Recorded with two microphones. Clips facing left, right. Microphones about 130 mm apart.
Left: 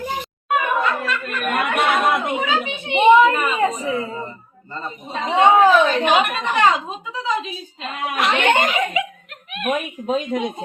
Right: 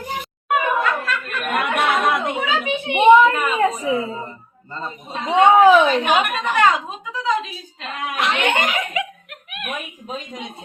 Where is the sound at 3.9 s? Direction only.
25° right (ahead or behind).